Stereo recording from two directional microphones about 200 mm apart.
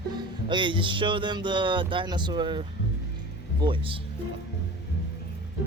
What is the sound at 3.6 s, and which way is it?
Speech, 25° right (ahead or behind).